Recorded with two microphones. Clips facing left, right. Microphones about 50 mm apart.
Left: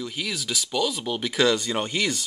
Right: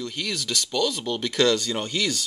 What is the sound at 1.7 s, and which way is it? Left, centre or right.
Speech, left.